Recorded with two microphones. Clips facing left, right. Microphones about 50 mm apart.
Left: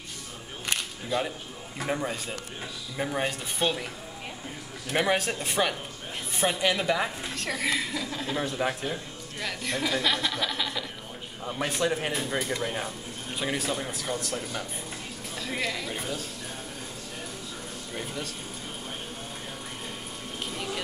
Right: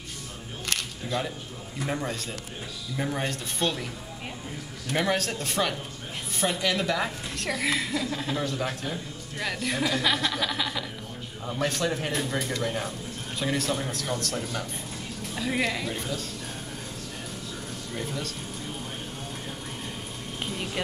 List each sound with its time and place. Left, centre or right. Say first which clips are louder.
0.7 s camera: left 1 dB; centre
1.9 s speech: left 1 dB; centre
4.9 s speech: left 1 dB; centre
7.3 s speech: right 2 dB; centre
8.4 s speech: left 1 dB; centre
8.9 s speech: right 1 dB; centre
11.4 s speech: even; centre
15.3 s speech: right 4 dB; centre
15.9 s speech: right 1 dB; centre
17.9 s speech: right 2 dB; centre